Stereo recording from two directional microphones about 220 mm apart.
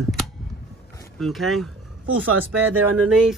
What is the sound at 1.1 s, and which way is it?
Speech, centre (ahead or behind).